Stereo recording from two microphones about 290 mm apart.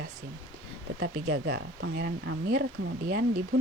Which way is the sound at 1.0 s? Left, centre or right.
Right.